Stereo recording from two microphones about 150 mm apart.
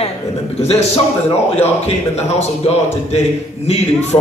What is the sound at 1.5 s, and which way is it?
A man's voice, 45° left (ahead or behind).